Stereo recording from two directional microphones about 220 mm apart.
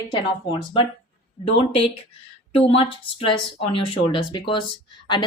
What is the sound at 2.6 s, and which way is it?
Speech, 25° left (ahead or behind).